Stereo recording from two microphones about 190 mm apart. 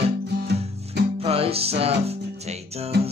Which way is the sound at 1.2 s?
30° right (ahead or behind).